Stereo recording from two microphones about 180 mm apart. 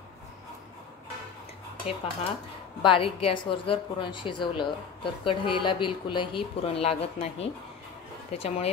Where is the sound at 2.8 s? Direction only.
30° left (ahead or behind).